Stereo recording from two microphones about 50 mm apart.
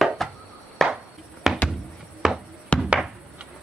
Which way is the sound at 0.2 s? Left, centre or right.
Centre.